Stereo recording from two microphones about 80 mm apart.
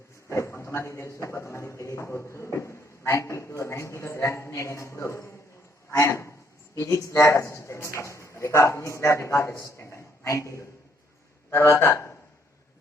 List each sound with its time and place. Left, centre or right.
0.3 s speech: left
9.9 s a sound: left
11.5 s speech: left